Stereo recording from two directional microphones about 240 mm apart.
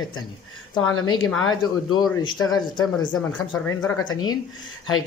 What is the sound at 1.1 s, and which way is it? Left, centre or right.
Speech, left.